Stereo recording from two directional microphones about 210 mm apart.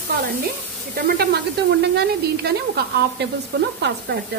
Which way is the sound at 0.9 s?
50° right (ahead or behind).